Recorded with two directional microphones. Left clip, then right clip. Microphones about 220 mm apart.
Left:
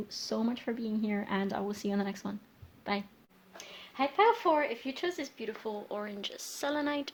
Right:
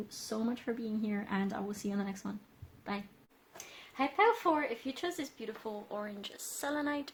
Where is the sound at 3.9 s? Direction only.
30° left (ahead or behind).